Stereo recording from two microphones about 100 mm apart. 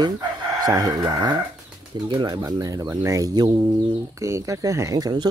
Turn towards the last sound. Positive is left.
turn(degrees=-45)  # may be behind; listen again after turning